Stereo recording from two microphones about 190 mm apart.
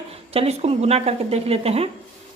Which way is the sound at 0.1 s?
30° right (ahead or behind).